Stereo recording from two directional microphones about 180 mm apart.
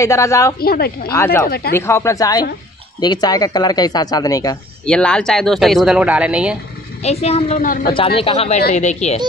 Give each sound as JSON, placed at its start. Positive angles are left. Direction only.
{"t": 0.0, "sound": "speech", "side_deg": 15}
{"t": 0.6, "sound": "speech", "side_deg": 60}
{"t": 1.1, "sound": "speech", "side_deg": 15}
{"t": 4.8, "sound": "speech", "side_deg": 5}
{"t": 7.0, "sound": "speech", "side_deg": 35}